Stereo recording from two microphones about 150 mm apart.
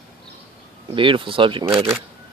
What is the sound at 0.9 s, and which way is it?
Speech, 35° right (ahead or behind).